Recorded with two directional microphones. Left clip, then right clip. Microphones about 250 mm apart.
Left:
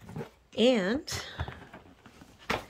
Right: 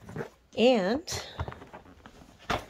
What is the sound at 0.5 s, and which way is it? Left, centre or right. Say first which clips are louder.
Speech: right 2 dB; centre.